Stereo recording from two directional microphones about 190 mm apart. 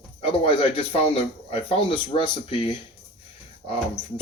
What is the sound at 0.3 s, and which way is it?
Speech, 30° left (ahead or behind).